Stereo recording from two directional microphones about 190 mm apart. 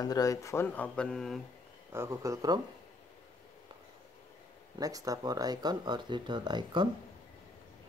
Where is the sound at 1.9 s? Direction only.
15° right (ahead or behind).